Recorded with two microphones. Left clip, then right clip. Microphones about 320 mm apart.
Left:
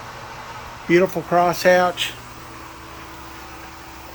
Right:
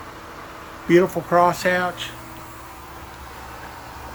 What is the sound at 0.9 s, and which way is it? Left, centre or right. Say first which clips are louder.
Speech: even; centre.